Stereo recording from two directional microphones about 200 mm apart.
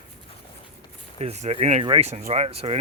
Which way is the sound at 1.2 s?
30° right (ahead or behind).